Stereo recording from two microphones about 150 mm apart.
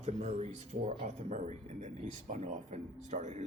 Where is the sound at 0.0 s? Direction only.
45° right (ahead or behind).